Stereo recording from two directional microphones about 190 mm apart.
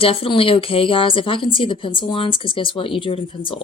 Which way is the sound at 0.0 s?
30° left (ahead or behind).